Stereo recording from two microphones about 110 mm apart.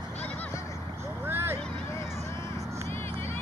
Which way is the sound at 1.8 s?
25° left (ahead or behind).